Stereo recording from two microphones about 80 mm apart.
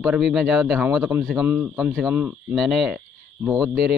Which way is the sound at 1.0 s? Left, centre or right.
Right.